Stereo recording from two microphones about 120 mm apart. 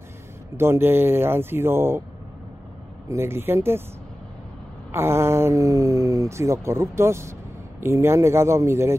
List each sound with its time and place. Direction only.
0.6 s speech: 20° right (ahead or behind)
3.1 s speech: 20° right (ahead or behind)
4.9 s speech: 20° right (ahead or behind)